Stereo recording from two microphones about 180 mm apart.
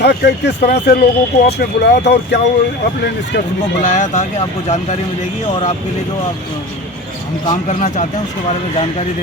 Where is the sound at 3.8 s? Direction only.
40° left (ahead or behind).